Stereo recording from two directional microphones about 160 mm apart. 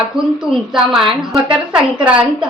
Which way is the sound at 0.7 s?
Centre (ahead or behind).